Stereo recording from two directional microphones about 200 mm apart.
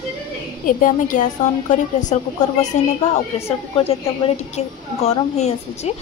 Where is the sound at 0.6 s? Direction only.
40° left (ahead or behind).